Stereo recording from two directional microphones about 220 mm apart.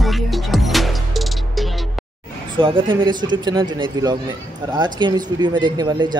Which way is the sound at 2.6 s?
20° right (ahead or behind).